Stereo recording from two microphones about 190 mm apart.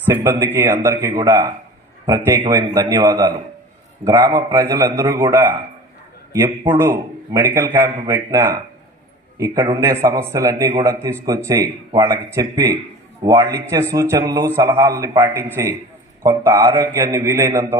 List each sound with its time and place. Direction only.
0.2 s a man's voice: 10° right (ahead or behind)
6.7 s a man's voice: 15° right (ahead or behind)
9.7 s a man's voice: 15° right (ahead or behind)